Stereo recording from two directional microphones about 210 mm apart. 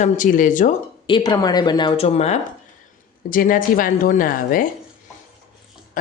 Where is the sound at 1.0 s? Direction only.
20° left (ahead or behind); by 4.7 s 40° left (ahead or behind).